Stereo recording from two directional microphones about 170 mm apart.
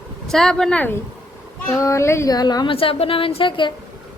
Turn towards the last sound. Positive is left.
turn(degrees=30)  # may be behind; listen again after turning